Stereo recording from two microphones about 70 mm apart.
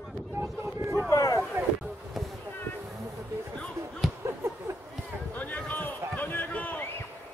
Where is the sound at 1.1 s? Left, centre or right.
Left.